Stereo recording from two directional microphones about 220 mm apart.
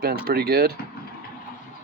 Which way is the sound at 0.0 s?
45° right (ahead or behind).